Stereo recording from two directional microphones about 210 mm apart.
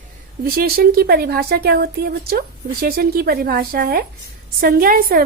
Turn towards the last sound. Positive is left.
turn(degrees=-45)  # may be behind; listen again after turning